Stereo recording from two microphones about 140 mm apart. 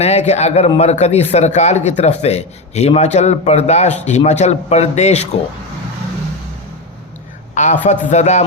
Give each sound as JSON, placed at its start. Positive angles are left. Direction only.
{"t": 0.0, "sound": "a man's voice", "side_deg": 50}
{"t": 7.5, "sound": "a man's voice", "side_deg": 60}